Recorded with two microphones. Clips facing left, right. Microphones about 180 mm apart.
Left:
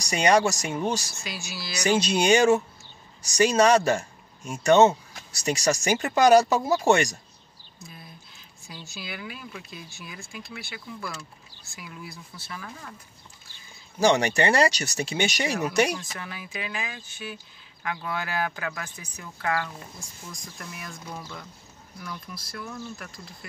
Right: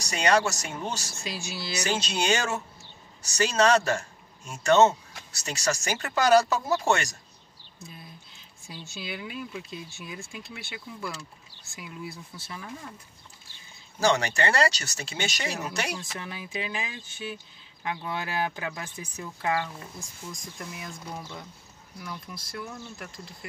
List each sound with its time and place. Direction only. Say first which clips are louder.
0.0 s speech: left 3 dB; 15° left (ahead or behind)
1.2 s speech: right 2 dB; 30° right (ahead or behind)
1.9 s speech: left 7 dB; 15° left (ahead or behind)
8.6 s speech: right 1 dB; 30° right (ahead or behind)
13.9 s speech: left 4 dB; 15° left (ahead or behind)
16.2 s speech: right 1 dB; 25° right (ahead or behind)